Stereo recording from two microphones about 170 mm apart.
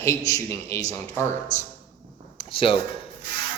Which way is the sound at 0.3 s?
20° left (ahead or behind).